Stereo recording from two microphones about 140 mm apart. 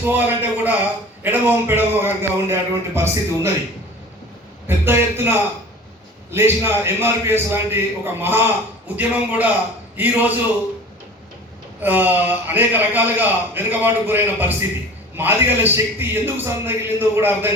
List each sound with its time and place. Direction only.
0.0 s a man's voice: 15° right (ahead or behind)
4.6 s a man's voice: 15° right (ahead or behind)
11.8 s a man's voice: 15° right (ahead or behind)